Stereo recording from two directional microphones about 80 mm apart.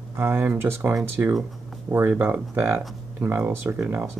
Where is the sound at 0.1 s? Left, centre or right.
Right.